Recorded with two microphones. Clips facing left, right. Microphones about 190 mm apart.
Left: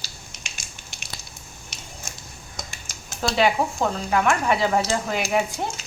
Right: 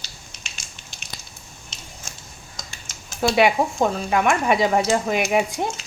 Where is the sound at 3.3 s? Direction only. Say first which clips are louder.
Right 2 dB; 15° right (ahead or behind).